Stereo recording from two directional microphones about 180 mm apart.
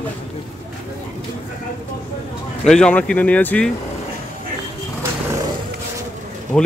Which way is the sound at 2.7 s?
5° left (ahead or behind).